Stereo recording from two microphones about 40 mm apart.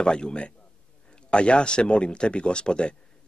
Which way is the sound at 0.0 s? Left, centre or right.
Left.